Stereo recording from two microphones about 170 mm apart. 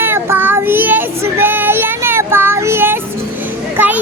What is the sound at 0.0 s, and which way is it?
Child singing, 15° right (ahead or behind).